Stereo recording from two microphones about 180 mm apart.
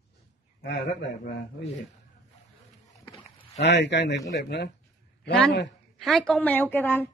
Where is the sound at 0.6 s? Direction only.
70° left (ahead or behind).